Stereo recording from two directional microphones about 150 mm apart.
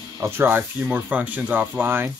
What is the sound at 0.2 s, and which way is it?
Speech, 15° right (ahead or behind).